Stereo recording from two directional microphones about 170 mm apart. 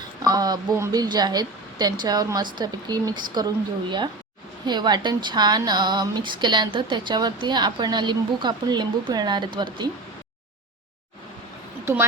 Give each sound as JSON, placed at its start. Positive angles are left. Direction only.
{"t": 0.2, "sound": "a woman's voice", "side_deg": -25}